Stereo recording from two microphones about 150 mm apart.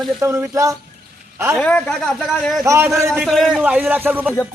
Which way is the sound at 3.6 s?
10° right (ahead or behind).